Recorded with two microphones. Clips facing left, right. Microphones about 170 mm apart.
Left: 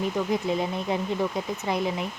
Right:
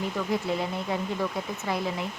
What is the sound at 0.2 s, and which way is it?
Speech, 20° left (ahead or behind).